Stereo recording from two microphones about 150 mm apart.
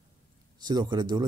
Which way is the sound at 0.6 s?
30° right (ahead or behind).